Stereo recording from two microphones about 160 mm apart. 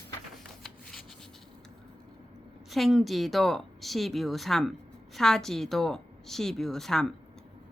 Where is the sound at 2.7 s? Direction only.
Centre (ahead or behind).